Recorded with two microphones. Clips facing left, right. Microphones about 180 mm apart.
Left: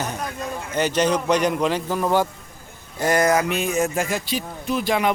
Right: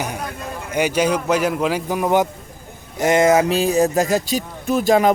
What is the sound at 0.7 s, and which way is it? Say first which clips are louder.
A man's voice: right 2 dB; 10° right (ahead or behind).